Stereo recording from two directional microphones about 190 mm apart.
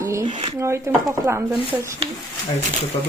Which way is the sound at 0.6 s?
15° right (ahead or behind).